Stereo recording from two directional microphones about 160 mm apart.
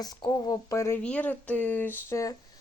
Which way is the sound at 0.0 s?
25° left (ahead or behind).